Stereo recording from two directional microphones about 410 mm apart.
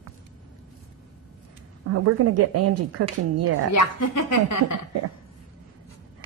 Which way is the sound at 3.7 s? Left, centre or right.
Left.